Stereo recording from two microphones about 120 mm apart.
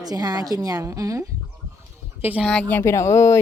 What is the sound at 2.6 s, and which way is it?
Speech, 15° left (ahead or behind).